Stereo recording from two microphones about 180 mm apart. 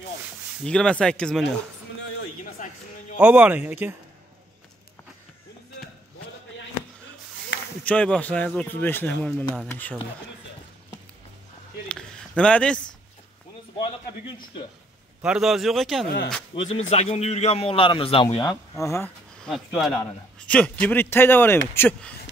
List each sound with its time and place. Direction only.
0.7 s speech: 5° left (ahead or behind)
2.4 s a sound: 45° left (ahead or behind)
3.2 s speech: 10° right (ahead or behind)
7.8 s speech: 5° left (ahead or behind)
11.9 s a sound: 5° left (ahead or behind)
15.2 s speech: 5° right (ahead or behind)
16.5 s a man's voice: 30° left (ahead or behind)
19.4 s speech: centre (ahead or behind)